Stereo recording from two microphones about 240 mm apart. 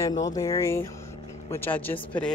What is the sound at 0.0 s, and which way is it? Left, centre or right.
Speech, centre.